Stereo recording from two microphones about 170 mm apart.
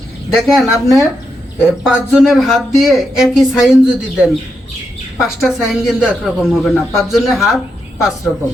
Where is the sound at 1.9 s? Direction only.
5° right (ahead or behind).